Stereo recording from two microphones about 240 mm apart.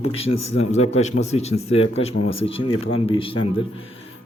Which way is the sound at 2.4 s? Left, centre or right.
Left.